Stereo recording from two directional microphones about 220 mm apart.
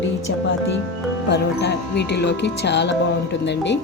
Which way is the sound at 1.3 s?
50° left (ahead or behind).